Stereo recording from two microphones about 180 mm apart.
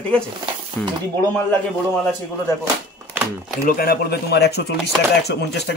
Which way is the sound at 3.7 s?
60° left (ahead or behind).